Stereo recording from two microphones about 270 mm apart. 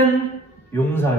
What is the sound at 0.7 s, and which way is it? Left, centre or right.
Speech, centre.